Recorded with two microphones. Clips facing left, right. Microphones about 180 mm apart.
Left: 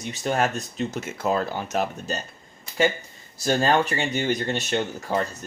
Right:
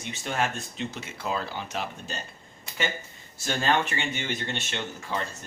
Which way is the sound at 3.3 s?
40° left (ahead or behind).